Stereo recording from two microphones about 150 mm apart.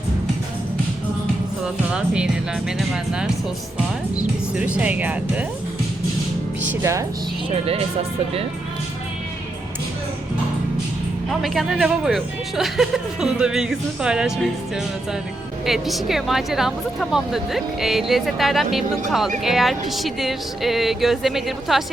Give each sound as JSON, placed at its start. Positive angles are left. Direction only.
{"t": 1.6, "sound": "speech", "side_deg": -5}
{"t": 4.5, "sound": "speech", "side_deg": -10}
{"t": 6.6, "sound": "speech", "side_deg": -20}
{"t": 7.5, "sound": "speech", "side_deg": -40}
{"t": 11.3, "sound": "speech", "side_deg": 0}
{"t": 15.6, "sound": "speech", "side_deg": 0}